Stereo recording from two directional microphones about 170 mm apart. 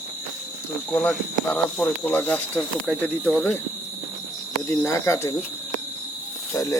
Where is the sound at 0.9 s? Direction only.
10° left (ahead or behind).